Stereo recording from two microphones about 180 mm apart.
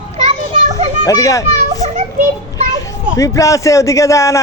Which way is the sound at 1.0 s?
20° left (ahead or behind).